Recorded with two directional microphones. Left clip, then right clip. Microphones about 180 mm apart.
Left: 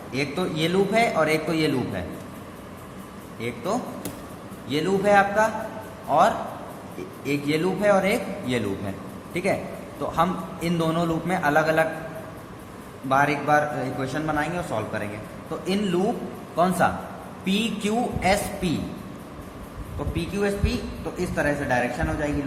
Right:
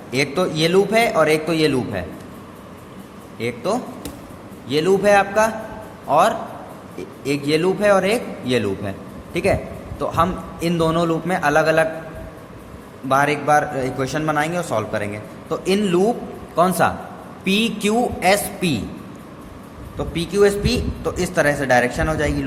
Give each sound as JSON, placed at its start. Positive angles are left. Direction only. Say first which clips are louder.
{"t": 0.1, "sound": "a man's voice", "louder": "right 7 dB", "side_deg": -40}
{"t": 3.4, "sound": "a man's voice", "louder": "right 5 dB", "side_deg": -30}
{"t": 13.1, "sound": "a man's voice", "louder": "right 4 dB", "side_deg": -30}
{"t": 20.1, "sound": "a man's voice", "louder": "right 10 dB", "side_deg": -60}